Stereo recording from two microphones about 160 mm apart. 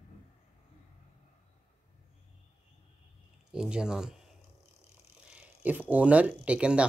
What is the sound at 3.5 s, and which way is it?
Speech, 5° right (ahead or behind).